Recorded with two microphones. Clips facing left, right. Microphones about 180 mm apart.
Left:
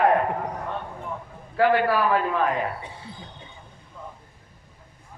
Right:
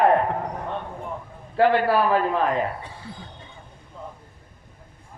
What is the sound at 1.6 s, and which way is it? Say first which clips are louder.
Speech: right 2 dB; 30° right (ahead or behind).